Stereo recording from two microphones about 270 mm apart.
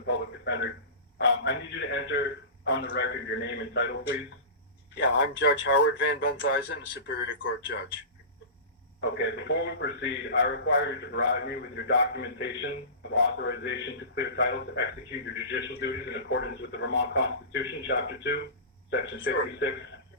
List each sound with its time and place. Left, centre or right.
0.0 s speech: left
4.9 s speech: left
9.0 s speech: left